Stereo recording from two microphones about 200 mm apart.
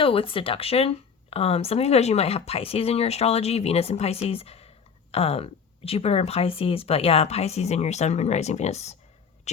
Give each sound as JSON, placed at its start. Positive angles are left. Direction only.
{"t": 0.0, "sound": "speech", "side_deg": 25}